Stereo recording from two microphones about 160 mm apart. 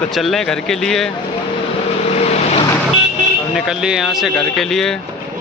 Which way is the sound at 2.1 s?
40° left (ahead or behind).